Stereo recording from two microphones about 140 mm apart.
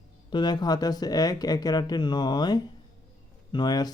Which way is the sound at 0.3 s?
30° left (ahead or behind).